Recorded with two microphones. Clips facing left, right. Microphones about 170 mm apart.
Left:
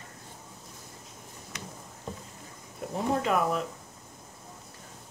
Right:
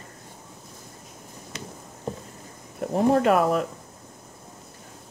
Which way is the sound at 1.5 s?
30° right (ahead or behind).